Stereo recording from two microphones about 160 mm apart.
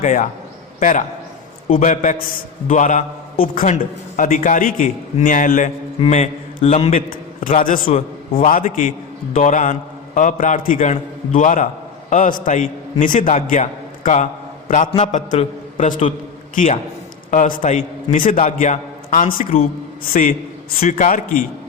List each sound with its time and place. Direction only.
0.0 s a man's voice: 50° left (ahead or behind)
6.0 s a man's voice: 40° left (ahead or behind)
7.1 s a man's voice: 60° left (ahead or behind)
7.9 s a man's voice: 35° left (ahead or behind)
8.4 s a man's voice: 55° left (ahead or behind)
17.3 s a man's voice: 55° left (ahead or behind)
20.7 s a man's voice: 65° left (ahead or behind)